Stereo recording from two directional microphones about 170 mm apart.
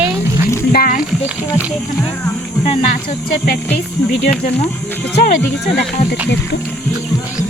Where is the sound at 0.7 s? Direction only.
60° left (ahead or behind).